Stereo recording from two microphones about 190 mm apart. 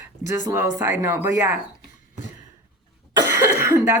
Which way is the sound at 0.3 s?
15° right (ahead or behind).